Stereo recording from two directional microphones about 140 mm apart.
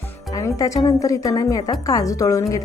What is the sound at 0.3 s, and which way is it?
A woman's voice, 25° left (ahead or behind).